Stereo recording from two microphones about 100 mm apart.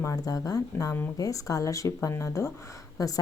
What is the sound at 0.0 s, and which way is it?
Speech, 35° left (ahead or behind).